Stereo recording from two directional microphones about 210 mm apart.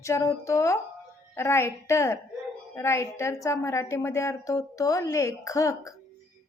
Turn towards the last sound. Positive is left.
turn(degrees=15)  # may be behind; listen again after turning